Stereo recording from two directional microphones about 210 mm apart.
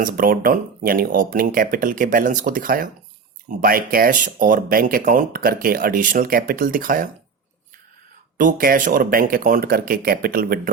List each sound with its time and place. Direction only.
0.0 s speech: 40° right (ahead or behind)
8.4 s speech: 40° right (ahead or behind)